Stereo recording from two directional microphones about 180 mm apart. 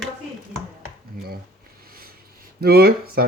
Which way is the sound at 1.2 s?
55° right (ahead or behind).